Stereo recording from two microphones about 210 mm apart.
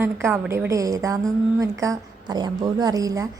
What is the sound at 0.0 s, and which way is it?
Speech, 10° right (ahead or behind).